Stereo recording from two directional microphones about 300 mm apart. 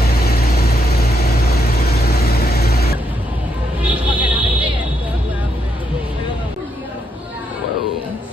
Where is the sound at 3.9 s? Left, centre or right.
Centre.